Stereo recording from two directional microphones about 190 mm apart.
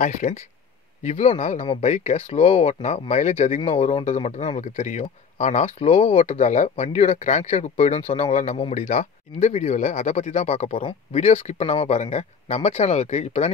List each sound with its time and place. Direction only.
0.0 s speech: 40° left (ahead or behind)